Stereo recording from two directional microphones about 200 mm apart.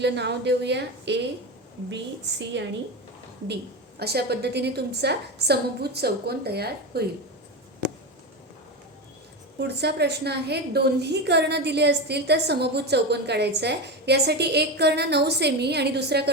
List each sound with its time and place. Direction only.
0.0 s a woman's voice: 60° right (ahead or behind)
2.4 s a woman's voice: 60° right (ahead or behind)
9.6 s a woman's voice: 55° right (ahead or behind)